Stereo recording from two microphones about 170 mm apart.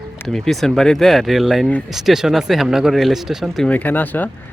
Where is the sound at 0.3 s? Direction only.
Centre (ahead or behind).